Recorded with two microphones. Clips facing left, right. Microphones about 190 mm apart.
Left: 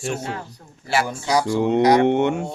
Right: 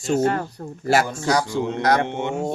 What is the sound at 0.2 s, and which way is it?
Speech, 55° right (ahead or behind).